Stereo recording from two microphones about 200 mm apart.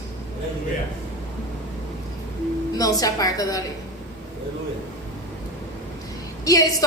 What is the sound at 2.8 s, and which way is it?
Speech, 15° left (ahead or behind).